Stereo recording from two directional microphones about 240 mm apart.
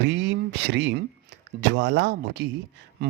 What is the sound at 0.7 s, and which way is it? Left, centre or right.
Speech, right.